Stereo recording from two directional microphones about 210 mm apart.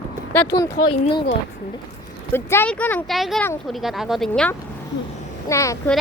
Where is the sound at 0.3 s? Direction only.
15° left (ahead or behind).